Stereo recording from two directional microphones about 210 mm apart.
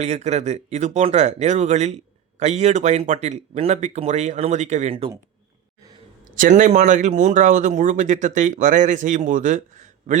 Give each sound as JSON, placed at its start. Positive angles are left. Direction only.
{"t": 0.0, "sound": "speech", "side_deg": -30}
{"t": 6.3, "sound": "speech", "side_deg": -40}